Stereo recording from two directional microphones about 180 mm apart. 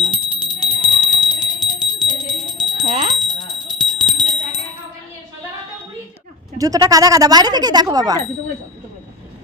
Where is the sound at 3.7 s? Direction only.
Centre (ahead or behind).